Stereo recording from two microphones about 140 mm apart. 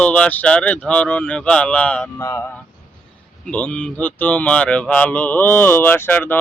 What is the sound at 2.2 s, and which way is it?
Speech, 20° left (ahead or behind).